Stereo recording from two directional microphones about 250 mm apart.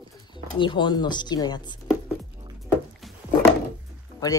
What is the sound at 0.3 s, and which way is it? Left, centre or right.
Speech, centre.